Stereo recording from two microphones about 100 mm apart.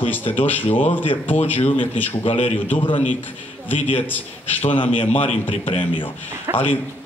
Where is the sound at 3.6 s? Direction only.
20° left (ahead or behind).